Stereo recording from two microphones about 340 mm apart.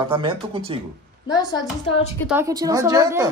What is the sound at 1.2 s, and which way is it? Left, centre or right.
Speech, centre.